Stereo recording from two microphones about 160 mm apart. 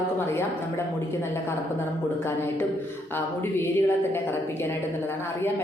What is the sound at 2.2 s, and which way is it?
A woman's voice, 15° left (ahead or behind).